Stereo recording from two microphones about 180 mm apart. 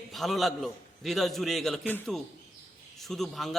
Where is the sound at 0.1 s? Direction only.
Centre (ahead or behind).